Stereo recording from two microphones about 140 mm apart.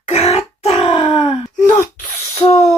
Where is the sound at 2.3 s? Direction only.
45° left (ahead or behind).